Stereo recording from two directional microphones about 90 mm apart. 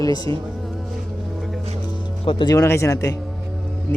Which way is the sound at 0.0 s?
45° left (ahead or behind).